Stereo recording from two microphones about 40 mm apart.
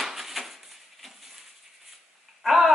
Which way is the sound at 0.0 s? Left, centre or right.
Centre.